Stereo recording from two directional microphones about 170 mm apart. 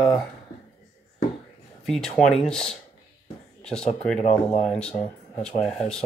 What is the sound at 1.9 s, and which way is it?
Speech, 5° left (ahead or behind).